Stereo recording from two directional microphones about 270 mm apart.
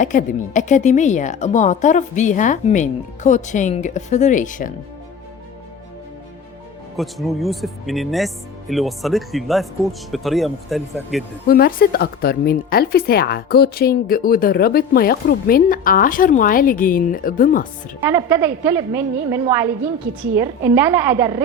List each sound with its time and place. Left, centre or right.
0.0 s a woman's voice: left
6.9 s speech: centre
11.4 s a woman's voice: left
18.0 s a woman's voice: centre